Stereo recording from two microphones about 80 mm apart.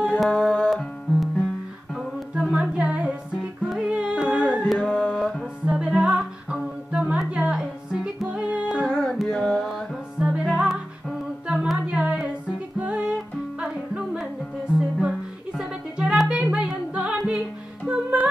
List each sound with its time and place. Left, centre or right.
0.2 s music: centre
2.3 s music: centre
4.7 s music: centre
5.7 s music: centre
7.9 s music: centre
8.8 s music: centre
10.1 s music: centre
11.4 s humming: centre
12.7 s music: centre